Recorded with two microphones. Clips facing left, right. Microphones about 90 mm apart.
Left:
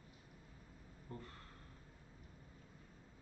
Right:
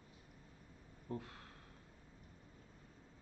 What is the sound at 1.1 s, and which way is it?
Speech, 75° right (ahead or behind).